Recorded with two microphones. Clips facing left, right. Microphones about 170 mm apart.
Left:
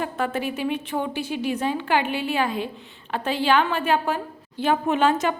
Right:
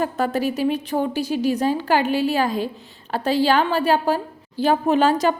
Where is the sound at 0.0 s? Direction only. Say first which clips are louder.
Right 4 dB; 40° right (ahead or behind).